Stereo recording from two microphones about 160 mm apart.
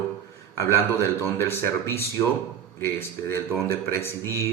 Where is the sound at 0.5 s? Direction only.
15° left (ahead or behind).